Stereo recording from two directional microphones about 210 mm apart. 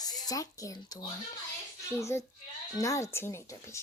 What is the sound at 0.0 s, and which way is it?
Speech, 20° left (ahead or behind).